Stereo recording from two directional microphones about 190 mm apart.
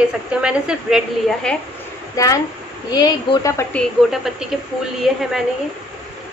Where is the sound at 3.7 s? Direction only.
Centre (ahead or behind).